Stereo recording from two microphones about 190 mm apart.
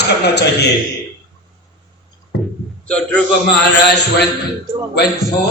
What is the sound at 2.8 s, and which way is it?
Speech, 5° left (ahead or behind).